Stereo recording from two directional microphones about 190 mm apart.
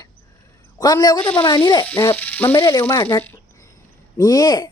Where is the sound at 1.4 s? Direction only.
20° left (ahead or behind).